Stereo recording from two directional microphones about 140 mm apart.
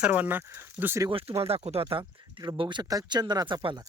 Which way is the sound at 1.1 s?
40° right (ahead or behind).